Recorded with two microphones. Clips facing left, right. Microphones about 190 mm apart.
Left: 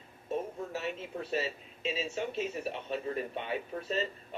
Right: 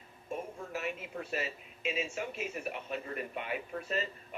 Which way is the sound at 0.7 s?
30° left (ahead or behind).